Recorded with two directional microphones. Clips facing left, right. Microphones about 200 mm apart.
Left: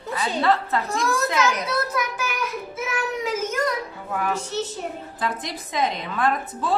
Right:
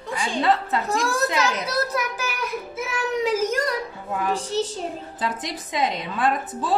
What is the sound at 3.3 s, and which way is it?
Speech, 35° right (ahead or behind).